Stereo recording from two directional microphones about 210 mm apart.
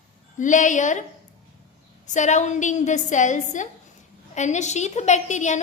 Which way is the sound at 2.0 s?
35° left (ahead or behind).